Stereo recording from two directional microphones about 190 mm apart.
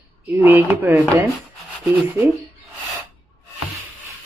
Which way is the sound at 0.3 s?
10° right (ahead or behind).